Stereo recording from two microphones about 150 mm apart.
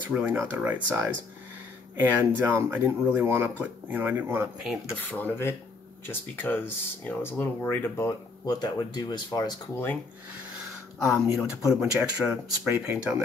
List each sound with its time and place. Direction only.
0.0 s speech: 10° right (ahead or behind)
5.0 s speech: 10° left (ahead or behind)
8.5 s speech: 25° left (ahead or behind)
11.3 s speech: centre (ahead or behind)